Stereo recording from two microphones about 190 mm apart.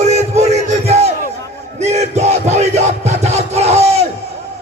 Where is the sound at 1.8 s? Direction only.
35° right (ahead or behind).